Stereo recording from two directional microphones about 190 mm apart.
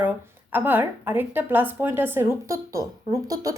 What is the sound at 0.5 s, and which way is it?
A woman's voice, 10° right (ahead or behind).